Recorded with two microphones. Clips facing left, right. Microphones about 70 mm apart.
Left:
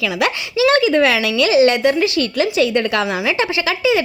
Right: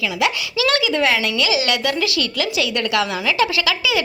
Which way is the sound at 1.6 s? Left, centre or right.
Left.